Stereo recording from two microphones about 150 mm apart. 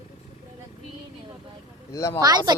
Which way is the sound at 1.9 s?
20° left (ahead or behind).